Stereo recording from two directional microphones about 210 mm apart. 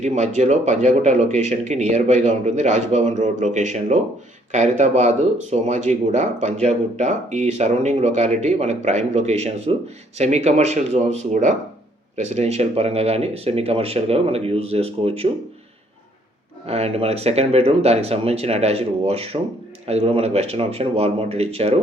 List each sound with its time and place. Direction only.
0.0 s speech: 35° right (ahead or behind)
16.6 s speech: 30° right (ahead or behind)